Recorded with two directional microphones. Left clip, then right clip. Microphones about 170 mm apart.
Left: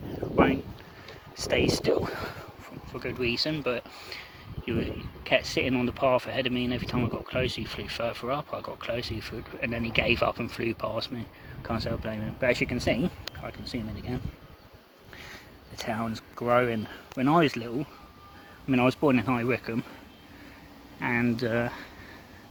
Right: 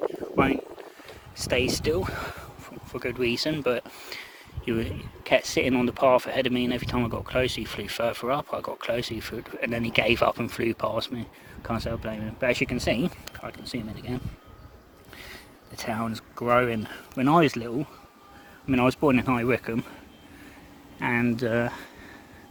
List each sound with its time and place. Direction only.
1.0 s speech: 15° right (ahead or behind)
2.9 s speech: 35° right (ahead or behind)
4.6 s speech: 45° right (ahead or behind)
5.3 s speech: 30° right (ahead or behind)
15.9 s speech: 15° right (ahead or behind)
18.7 s speech: 10° right (ahead or behind)
21.0 s speech: 15° right (ahead or behind)